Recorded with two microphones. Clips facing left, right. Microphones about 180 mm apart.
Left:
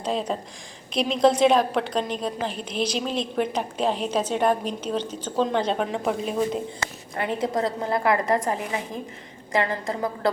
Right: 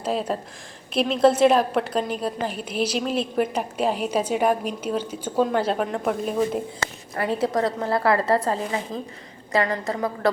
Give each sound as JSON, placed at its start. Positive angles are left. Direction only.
{"t": 0.0, "sound": "a woman's voice", "side_deg": -5}
{"t": 7.4, "sound": "a woman's voice", "side_deg": 20}